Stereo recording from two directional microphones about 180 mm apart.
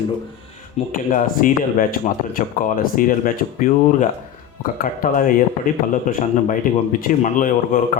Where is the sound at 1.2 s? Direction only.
50° left (ahead or behind).